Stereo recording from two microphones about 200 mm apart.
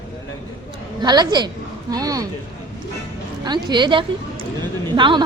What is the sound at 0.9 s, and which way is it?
A woman's voice, 20° right (ahead or behind).